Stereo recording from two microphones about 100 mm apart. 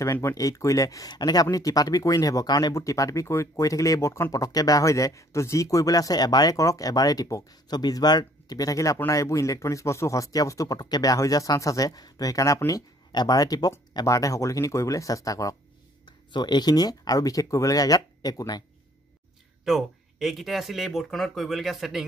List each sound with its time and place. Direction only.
0.0 s speech: 30° left (ahead or behind)
16.1 s speech: 45° left (ahead or behind)
19.6 s speech: centre (ahead or behind)